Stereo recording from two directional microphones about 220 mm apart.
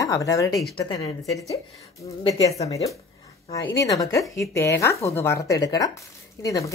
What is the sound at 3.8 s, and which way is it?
Speech, 15° left (ahead or behind).